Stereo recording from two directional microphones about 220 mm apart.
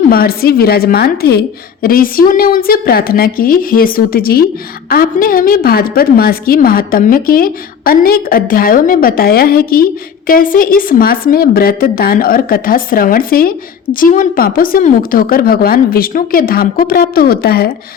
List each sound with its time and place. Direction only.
0.1 s a woman's voice: 40° left (ahead or behind)